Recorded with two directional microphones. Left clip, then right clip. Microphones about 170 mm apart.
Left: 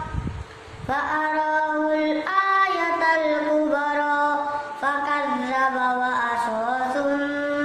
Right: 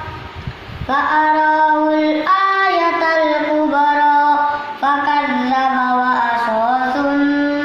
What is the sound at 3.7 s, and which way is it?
Music, 25° left (ahead or behind).